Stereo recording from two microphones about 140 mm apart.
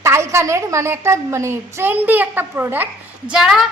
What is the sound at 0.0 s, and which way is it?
A woman's voice, 20° right (ahead or behind).